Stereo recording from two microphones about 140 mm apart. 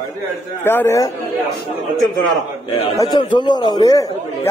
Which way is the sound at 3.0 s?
30° left (ahead or behind).